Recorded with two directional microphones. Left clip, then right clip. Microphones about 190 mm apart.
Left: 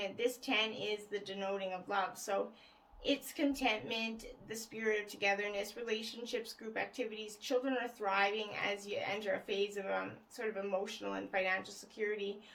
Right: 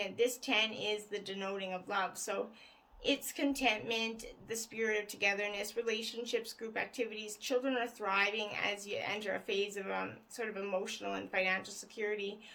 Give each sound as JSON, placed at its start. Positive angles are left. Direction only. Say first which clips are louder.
{"t": 0.0, "sound": "speech", "louder": "right 3 dB", "side_deg": -50}